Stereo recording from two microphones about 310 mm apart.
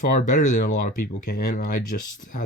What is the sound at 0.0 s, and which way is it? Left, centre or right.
Speech, left.